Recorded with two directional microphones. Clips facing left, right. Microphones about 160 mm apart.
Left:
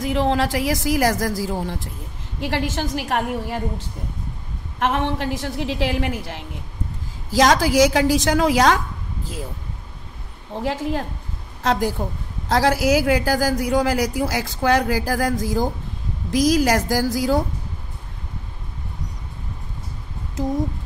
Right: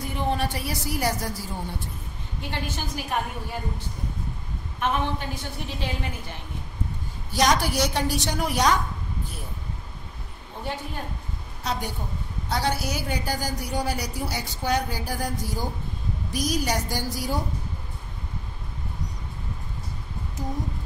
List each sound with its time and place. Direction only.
0.0 s a woman's voice: 90° left
10.6 s a woman's voice: 90° left